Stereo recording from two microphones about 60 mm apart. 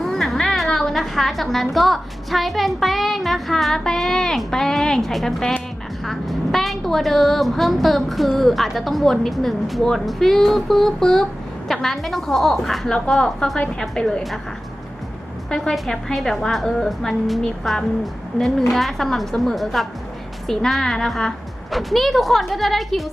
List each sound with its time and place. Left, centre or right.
0.0 s a sound: centre
0.3 s a woman's voice: centre
15.4 s a woman's voice: centre